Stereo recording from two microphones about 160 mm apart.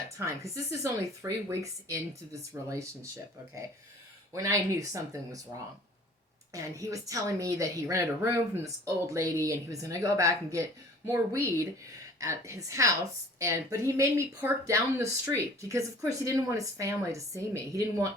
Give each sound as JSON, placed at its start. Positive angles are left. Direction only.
{"t": 0.3, "sound": "speech", "side_deg": -20}
{"t": 4.4, "sound": "speech", "side_deg": -20}
{"t": 6.5, "sound": "speech", "side_deg": -20}